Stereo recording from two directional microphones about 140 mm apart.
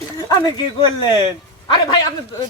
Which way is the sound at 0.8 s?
30° left (ahead or behind).